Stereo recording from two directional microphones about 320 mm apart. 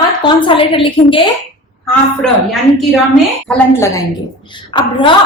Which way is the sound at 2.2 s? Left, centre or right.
Centre.